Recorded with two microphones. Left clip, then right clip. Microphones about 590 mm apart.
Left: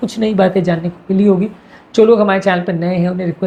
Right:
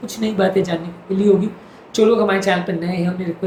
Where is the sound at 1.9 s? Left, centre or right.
Left.